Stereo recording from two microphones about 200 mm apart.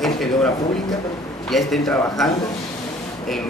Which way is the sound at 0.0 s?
Centre (ahead or behind).